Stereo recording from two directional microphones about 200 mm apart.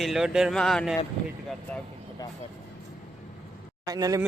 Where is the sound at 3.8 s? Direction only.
15° right (ahead or behind).